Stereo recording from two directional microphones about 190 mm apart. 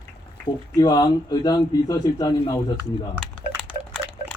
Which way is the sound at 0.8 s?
20° left (ahead or behind).